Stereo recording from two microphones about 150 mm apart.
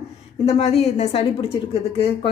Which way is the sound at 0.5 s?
45° left (ahead or behind).